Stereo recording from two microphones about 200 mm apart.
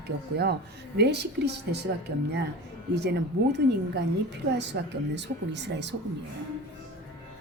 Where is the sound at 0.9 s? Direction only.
55° right (ahead or behind).